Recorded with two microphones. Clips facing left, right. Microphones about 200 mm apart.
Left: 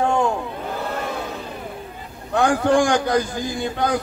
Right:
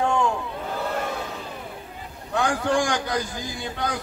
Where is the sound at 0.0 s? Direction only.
40° left (ahead or behind).